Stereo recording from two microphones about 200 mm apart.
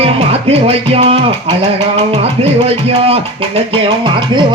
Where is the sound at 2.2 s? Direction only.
30° right (ahead or behind).